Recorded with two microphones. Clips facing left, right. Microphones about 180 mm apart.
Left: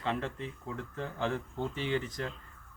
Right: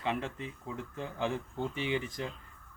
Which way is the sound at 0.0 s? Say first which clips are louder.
Even; 10° right (ahead or behind).